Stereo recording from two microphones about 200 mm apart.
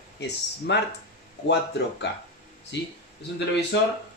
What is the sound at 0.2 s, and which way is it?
Speech, 60° left (ahead or behind).